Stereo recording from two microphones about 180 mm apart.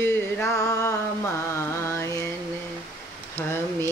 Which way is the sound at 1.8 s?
15° left (ahead or behind).